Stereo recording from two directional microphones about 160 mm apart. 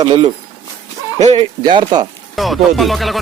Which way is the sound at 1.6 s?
30° right (ahead or behind).